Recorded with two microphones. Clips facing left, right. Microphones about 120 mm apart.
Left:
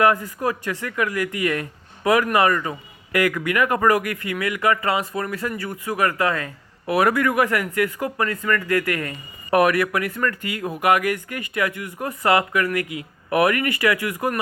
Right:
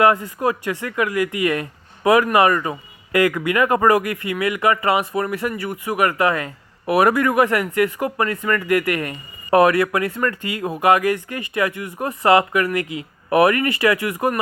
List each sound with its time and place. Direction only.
0.0 s speech: 25° right (ahead or behind)